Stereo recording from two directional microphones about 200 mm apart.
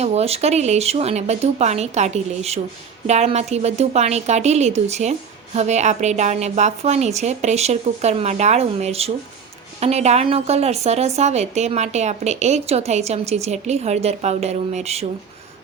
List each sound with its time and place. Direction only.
0.0 s speech: 30° right (ahead or behind)